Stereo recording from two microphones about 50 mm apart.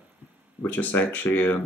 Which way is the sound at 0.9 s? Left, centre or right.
Left.